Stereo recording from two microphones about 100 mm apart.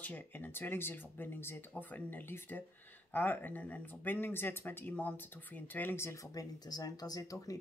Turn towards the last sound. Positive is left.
turn(degrees=35)  # may be behind; listen again after turning